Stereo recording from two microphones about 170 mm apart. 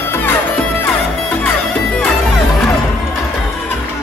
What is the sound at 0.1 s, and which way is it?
Music, 15° left (ahead or behind).